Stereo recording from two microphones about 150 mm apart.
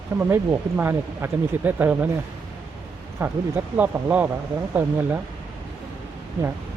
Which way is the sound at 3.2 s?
15° right (ahead or behind).